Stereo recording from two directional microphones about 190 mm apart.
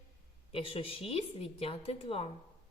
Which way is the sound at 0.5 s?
30° left (ahead or behind).